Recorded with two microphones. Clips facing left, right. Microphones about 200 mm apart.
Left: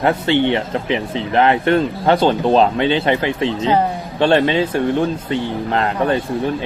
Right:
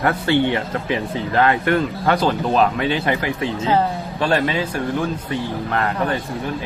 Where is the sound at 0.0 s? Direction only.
20° left (ahead or behind).